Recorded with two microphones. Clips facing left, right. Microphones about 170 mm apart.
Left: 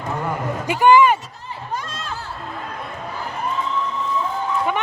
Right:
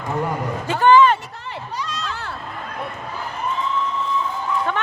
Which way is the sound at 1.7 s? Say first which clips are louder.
Left 1 dB; 50° left (ahead or behind).